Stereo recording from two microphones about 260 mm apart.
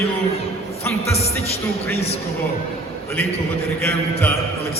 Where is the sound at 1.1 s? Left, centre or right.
Left.